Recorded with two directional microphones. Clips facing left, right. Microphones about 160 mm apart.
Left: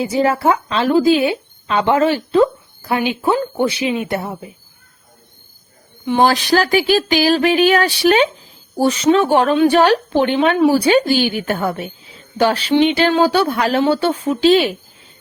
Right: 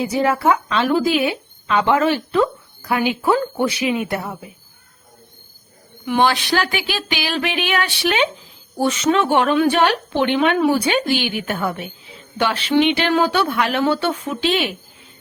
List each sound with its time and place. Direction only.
0.0 s speech: 30° left (ahead or behind)
6.1 s speech: 35° left (ahead or behind)